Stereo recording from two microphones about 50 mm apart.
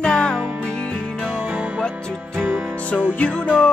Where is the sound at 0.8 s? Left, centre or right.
Left.